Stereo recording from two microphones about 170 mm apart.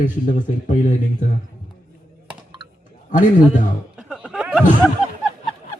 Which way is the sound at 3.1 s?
50° left (ahead or behind).